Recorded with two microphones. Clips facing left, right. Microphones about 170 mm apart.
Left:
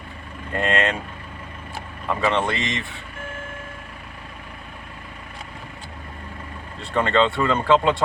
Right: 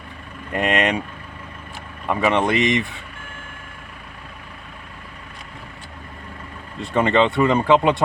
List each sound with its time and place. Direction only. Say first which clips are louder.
0.5 s speech: right 2 dB; 15° right (ahead or behind)
2.0 s speech: right 3 dB; 15° right (ahead or behind)
6.8 s speech: right 2 dB; 20° right (ahead or behind)